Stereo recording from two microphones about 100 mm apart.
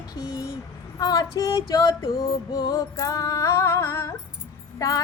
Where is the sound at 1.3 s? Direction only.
35° left (ahead or behind).